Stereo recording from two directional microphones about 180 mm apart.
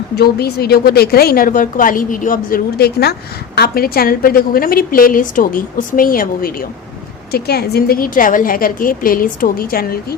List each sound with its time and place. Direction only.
0.2 s a woman's voice: 60° left (ahead or behind)